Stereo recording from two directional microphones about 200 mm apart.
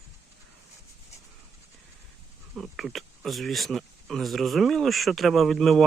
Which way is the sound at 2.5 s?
Centre (ahead or behind).